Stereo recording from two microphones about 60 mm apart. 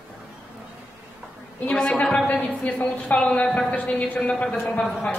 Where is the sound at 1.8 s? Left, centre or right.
Centre.